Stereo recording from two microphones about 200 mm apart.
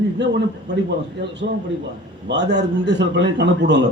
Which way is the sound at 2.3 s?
60° right (ahead or behind).